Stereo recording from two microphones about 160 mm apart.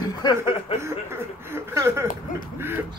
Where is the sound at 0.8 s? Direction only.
15° right (ahead or behind).